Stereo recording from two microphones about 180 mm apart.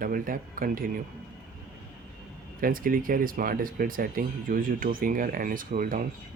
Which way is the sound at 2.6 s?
50° right (ahead or behind).